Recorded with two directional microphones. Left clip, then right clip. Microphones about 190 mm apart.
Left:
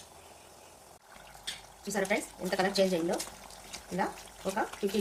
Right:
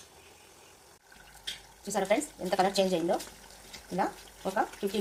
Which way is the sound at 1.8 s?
15° right (ahead or behind).